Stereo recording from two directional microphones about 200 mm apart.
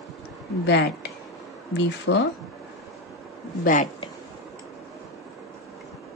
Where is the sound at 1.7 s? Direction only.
60° left (ahead or behind).